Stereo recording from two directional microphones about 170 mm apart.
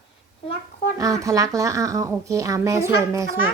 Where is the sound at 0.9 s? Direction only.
20° right (ahead or behind).